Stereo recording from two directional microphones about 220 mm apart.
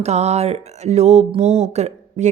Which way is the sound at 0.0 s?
30° right (ahead or behind).